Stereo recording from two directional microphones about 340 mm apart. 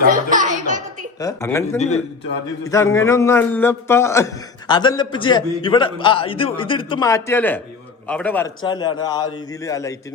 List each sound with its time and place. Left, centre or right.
0.0 s music: right
1.2 s a man's voice: centre
2.6 s a man's voice: centre